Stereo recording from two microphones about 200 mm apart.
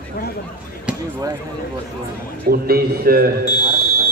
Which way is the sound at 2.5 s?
50° right (ahead or behind).